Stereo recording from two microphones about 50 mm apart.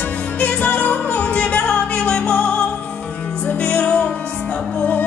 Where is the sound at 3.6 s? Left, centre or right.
Left.